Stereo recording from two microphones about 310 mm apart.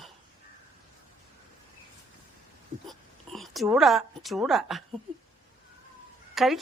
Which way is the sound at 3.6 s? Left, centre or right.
Centre.